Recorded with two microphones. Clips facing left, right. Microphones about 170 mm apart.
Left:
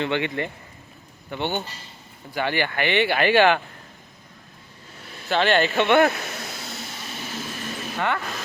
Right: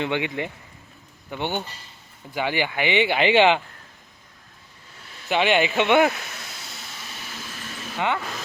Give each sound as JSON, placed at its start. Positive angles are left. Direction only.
{"t": 0.0, "sound": "speech", "side_deg": -10}
{"t": 5.3, "sound": "speech", "side_deg": -15}
{"t": 7.9, "sound": "speech", "side_deg": -15}